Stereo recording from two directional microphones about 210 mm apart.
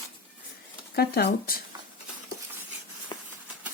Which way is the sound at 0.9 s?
50° left (ahead or behind).